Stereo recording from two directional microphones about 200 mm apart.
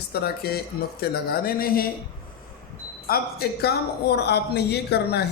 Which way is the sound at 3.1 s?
50° left (ahead or behind).